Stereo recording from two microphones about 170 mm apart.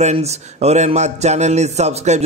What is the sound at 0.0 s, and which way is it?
Speech, 40° right (ahead or behind).